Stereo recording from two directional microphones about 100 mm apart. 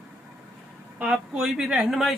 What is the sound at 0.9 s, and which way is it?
Speech, 10° right (ahead or behind).